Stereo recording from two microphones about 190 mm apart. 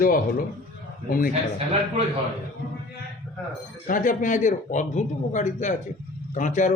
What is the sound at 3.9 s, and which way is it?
Speech, 45° left (ahead or behind).